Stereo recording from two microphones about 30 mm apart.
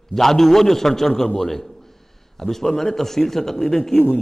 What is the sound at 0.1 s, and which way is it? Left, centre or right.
A man's voice, centre.